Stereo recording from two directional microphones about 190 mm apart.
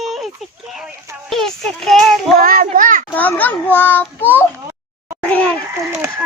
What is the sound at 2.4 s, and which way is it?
Speech, 50° right (ahead or behind).